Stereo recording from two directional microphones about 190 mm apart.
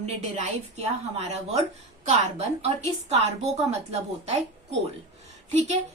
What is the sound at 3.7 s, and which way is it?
Speech, 35° right (ahead or behind).